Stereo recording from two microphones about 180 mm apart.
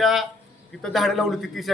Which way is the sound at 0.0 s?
Centre (ahead or behind).